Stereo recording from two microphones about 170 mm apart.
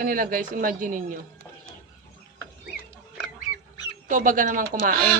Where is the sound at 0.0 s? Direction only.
55° right (ahead or behind).